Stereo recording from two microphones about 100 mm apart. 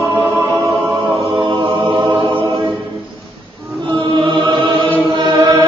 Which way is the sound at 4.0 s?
55° right (ahead or behind).